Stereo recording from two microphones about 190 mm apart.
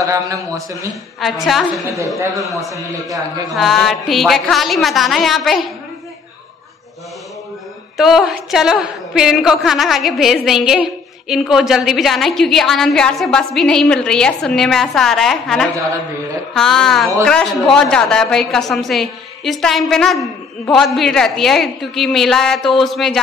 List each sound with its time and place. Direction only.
0.0 s a man's voice: 15° right (ahead or behind)
1.2 s a woman's voice: centre (ahead or behind)
3.5 s a woman's voice: centre (ahead or behind)
8.0 s a woman's voice: centre (ahead or behind)